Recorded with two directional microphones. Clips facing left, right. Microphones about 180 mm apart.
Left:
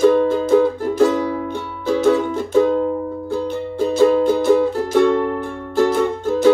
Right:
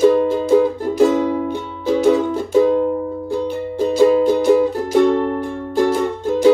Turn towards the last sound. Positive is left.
turn(degrees=-15)  # may be behind; listen again after turning